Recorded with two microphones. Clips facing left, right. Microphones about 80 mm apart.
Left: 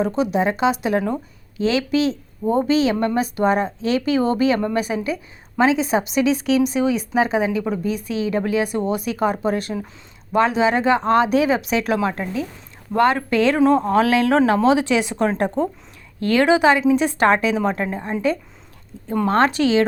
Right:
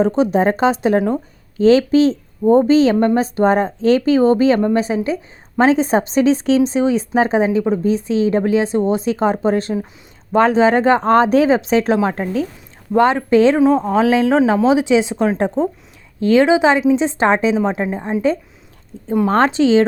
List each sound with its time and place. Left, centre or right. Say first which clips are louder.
0.0 s a woman's voice: right 5 dB; right
13.0 s a woman's voice: right 5 dB; right
19.3 s a woman's voice: right 3 dB; right